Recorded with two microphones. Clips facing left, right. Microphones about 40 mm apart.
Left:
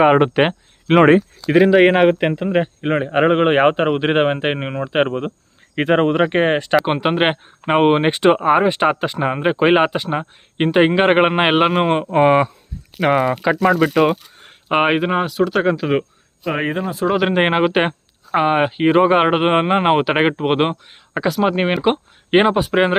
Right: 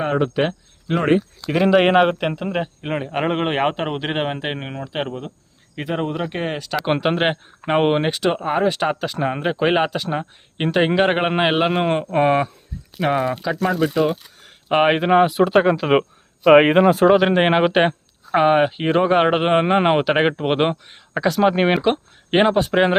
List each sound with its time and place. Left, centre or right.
0.0 s speech: left
1.6 s speech: centre; by 4.9 s left
4.9 s speech: left
6.7 s speech: centre
7.2 s speech: centre
8.1 s speech: left
13.7 s speech: left
13.9 s speech: left
14.7 s speech: centre
15.2 s speech: right
15.6 s speech: centre
16.4 s speech: right
17.2 s speech: centre